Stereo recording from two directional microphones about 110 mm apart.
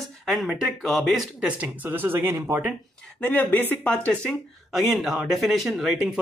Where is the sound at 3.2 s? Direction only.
15° left (ahead or behind).